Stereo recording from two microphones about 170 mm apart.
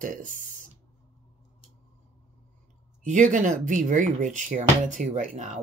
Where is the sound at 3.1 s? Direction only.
50° right (ahead or behind).